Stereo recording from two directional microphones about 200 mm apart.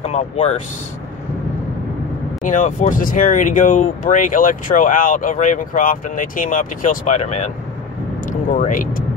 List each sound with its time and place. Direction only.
0.0 s speech: 30° left (ahead or behind)
2.4 s speech: 40° left (ahead or behind)